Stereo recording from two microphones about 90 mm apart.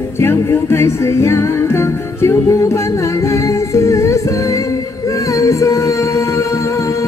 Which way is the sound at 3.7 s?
35° left (ahead or behind).